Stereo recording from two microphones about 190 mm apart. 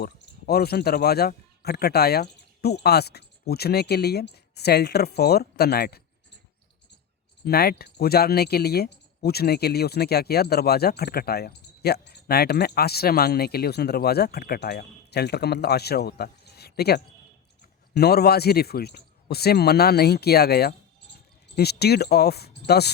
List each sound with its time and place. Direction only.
0.0 s speech: 55° left (ahead or behind)
7.4 s speech: 55° left (ahead or behind)